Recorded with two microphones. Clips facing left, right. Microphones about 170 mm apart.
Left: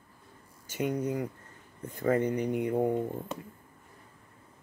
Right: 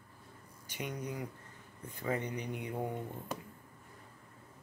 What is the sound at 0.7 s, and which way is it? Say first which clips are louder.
Speech: left 10 dB; 45° left (ahead or behind).